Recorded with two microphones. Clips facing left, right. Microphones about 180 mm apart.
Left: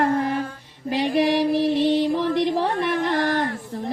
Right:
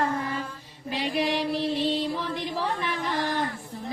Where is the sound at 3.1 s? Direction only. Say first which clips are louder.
Left 6 dB; 65° left (ahead or behind).